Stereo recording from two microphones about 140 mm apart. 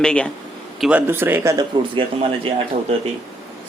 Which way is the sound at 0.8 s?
10° right (ahead or behind).